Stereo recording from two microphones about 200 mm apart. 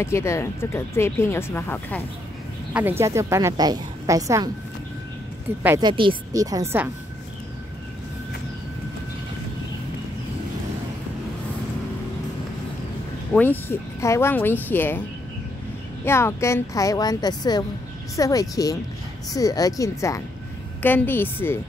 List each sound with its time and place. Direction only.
0.0 s speech: 15° left (ahead or behind)
2.7 s a woman's voice: 10° right (ahead or behind)
5.8 s a woman's voice: 25° right (ahead or behind)
13.3 s speech: 10° left (ahead or behind)
16.1 s speech: 15° left (ahead or behind)